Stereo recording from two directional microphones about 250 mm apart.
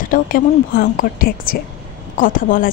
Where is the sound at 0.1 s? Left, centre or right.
Left.